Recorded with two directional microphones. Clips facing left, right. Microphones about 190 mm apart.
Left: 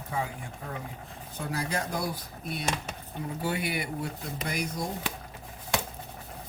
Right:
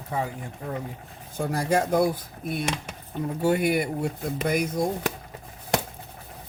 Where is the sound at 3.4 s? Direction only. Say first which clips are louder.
Right 10 dB; 50° right (ahead or behind).